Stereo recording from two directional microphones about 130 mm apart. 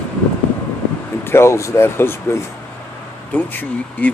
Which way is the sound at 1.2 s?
20° left (ahead or behind).